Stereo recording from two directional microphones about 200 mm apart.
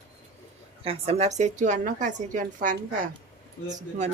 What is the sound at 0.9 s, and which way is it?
Speech, 30° right (ahead or behind).